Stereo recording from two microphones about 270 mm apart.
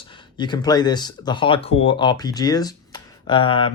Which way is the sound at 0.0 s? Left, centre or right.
Centre.